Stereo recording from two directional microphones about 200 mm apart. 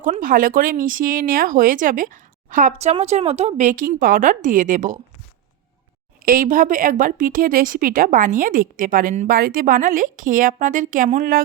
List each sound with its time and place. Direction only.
0.0 s speech: 45° right (ahead or behind)
6.2 s a woman's voice: 45° right (ahead or behind)